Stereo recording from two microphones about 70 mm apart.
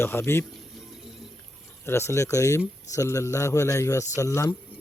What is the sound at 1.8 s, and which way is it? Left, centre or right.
Speech, left.